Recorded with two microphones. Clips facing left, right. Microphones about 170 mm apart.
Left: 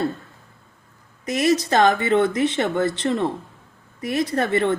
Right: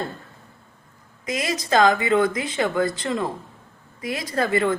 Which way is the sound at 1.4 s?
25° left (ahead or behind).